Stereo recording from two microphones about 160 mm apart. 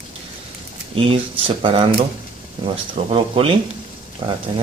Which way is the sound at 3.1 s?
35° right (ahead or behind).